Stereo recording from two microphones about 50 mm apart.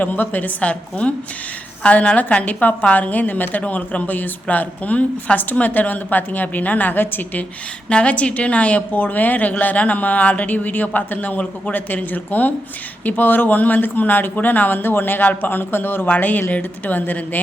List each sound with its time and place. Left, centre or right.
0.0 s a woman's voice: left
7.9 s a woman's voice: left